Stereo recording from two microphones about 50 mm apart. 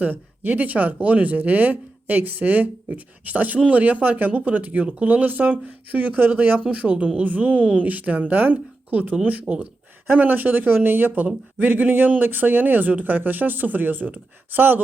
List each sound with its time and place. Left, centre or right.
0.0 s a woman's voice: right